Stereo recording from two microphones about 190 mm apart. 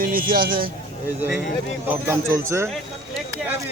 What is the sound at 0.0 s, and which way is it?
Speech, 50° right (ahead or behind).